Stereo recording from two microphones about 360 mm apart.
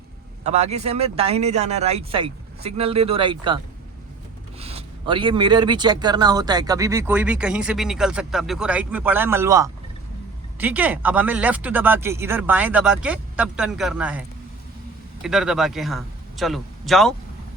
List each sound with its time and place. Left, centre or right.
0.4 s speech: centre
4.6 s a man's voice: centre